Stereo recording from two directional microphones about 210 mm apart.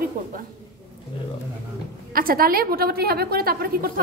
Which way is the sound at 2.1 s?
45° right (ahead or behind).